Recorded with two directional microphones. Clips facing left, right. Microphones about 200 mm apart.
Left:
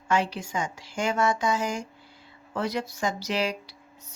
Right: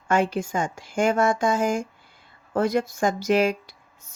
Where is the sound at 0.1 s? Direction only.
50° right (ahead or behind).